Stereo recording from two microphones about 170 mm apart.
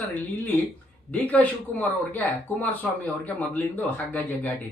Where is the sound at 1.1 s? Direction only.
10° left (ahead or behind).